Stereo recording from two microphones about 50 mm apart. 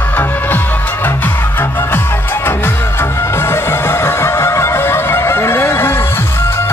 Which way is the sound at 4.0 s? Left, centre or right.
Left.